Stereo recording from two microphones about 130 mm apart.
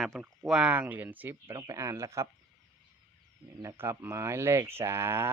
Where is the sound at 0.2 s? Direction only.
5° right (ahead or behind).